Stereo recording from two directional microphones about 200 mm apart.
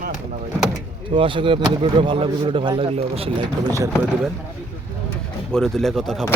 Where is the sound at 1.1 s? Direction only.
25° right (ahead or behind).